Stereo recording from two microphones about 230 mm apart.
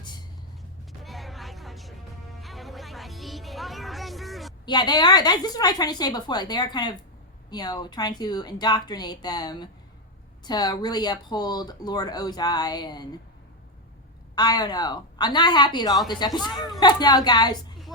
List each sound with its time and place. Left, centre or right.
1.0 s a sound: centre
2.4 s music: centre
4.6 s speech: centre
14.3 s a woman's voice: centre